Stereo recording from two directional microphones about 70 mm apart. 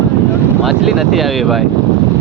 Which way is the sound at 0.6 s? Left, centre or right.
Centre.